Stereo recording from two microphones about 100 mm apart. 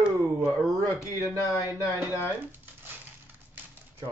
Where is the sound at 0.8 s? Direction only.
30° left (ahead or behind).